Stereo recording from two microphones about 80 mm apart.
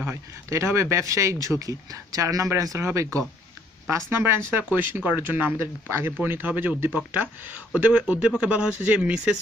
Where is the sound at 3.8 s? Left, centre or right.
Right.